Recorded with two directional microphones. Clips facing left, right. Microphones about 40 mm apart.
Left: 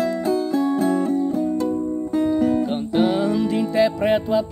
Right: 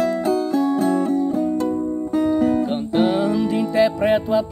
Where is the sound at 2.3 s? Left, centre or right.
Right.